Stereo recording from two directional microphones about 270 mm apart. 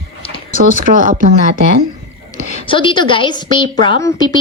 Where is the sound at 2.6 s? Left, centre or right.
Centre.